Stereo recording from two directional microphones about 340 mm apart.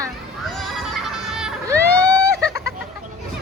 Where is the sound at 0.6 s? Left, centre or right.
Centre.